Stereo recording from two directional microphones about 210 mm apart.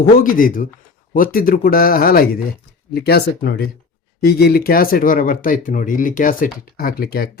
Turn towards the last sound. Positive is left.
turn(degrees=45)  # may be behind; listen again after turning